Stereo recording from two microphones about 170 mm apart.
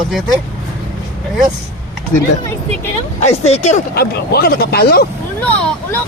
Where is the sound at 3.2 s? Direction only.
40° left (ahead or behind).